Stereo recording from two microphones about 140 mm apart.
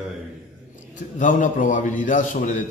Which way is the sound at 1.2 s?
65° left (ahead or behind).